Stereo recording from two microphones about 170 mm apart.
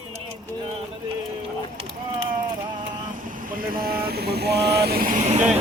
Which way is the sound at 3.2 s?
55° right (ahead or behind).